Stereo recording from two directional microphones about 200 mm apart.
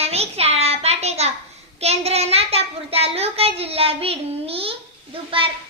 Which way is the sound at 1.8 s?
30° right (ahead or behind).